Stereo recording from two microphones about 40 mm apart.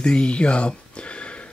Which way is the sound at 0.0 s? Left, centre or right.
Left.